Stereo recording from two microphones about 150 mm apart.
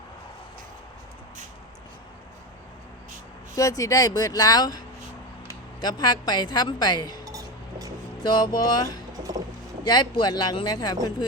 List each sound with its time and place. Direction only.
3.5 s speech: 20° left (ahead or behind)
5.8 s speech: 30° left (ahead or behind)
7.3 s chink: 25° right (ahead or behind)
8.2 s speech: 30° left (ahead or behind)